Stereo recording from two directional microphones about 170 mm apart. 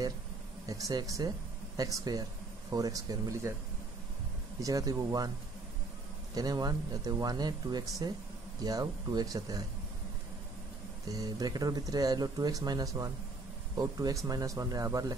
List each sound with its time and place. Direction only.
0.7 s speech: 20° right (ahead or behind)
4.6 s speech: 20° right (ahead or behind)
6.3 s speech: 25° right (ahead or behind)
11.1 s speech: 20° right (ahead or behind)